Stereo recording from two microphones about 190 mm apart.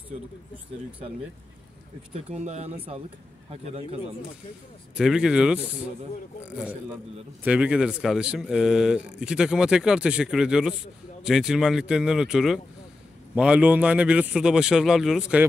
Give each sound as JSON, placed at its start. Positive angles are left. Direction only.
{"t": 2.1, "sound": "speech", "side_deg": -35}
{"t": 4.9, "sound": "a man's voice", "side_deg": -5}